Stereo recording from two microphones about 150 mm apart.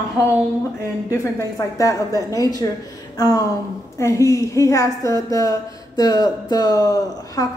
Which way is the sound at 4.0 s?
20° left (ahead or behind).